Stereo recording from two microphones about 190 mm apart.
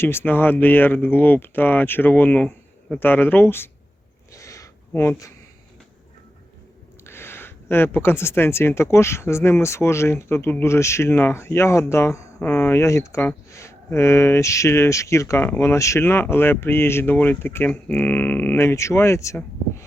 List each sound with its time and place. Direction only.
0.0 s speech: 10° left (ahead or behind)
4.3 s a sound: 15° left (ahead or behind)
7.0 s speech: 10° left (ahead or behind)